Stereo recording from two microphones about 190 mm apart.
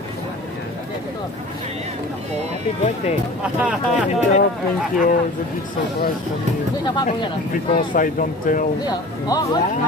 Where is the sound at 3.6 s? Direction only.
5° right (ahead or behind).